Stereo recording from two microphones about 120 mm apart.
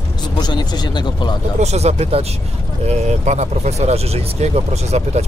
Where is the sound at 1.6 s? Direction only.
65° right (ahead or behind).